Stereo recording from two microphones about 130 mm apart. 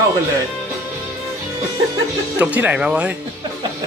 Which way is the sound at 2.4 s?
10° right (ahead or behind).